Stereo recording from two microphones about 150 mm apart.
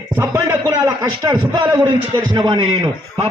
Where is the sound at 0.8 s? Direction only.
25° right (ahead or behind).